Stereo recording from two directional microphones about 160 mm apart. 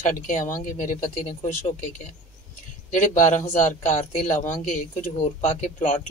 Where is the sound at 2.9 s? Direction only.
50° left (ahead or behind).